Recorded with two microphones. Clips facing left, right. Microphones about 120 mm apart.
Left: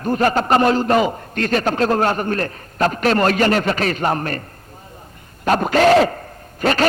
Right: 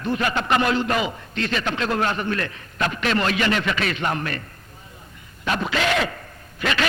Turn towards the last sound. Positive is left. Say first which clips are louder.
# left 6 dB
turn(degrees=40)  # may be behind; listen again after turning